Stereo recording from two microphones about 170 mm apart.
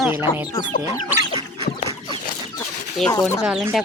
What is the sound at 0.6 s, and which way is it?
Chicken, 20° left (ahead or behind).